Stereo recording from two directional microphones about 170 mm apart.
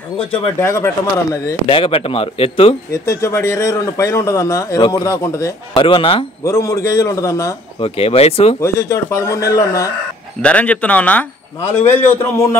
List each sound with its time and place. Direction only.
0.6 s a man's voice: 15° left (ahead or behind)
1.7 s speech: 30° left (ahead or behind)
2.9 s speech: 15° left (ahead or behind)
5.8 s speech: 30° left (ahead or behind)
6.4 s a man's voice: 20° left (ahead or behind)
7.8 s speech: 35° left (ahead or behind)
8.5 s speech: 15° left (ahead or behind)
10.4 s a man's voice: 10° left (ahead or behind)